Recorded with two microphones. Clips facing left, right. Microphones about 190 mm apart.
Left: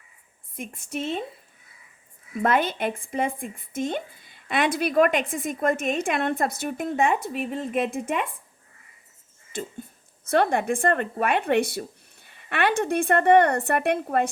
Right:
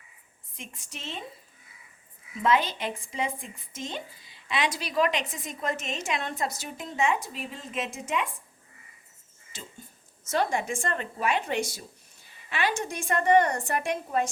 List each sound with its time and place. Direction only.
0.5 s speech: 55° left (ahead or behind)
2.3 s speech: 55° left (ahead or behind)
9.5 s speech: 55° left (ahead or behind)